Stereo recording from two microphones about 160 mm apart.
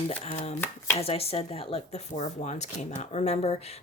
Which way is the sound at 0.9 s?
40° left (ahead or behind).